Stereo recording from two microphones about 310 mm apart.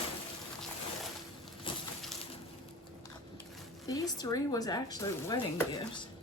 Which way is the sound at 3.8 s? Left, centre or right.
Centre.